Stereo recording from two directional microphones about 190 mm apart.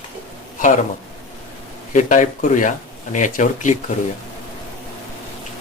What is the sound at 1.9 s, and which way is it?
Speech, 40° left (ahead or behind).